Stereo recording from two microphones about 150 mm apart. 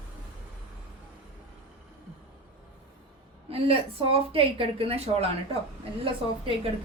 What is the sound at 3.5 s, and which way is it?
A woman's voice, 40° right (ahead or behind).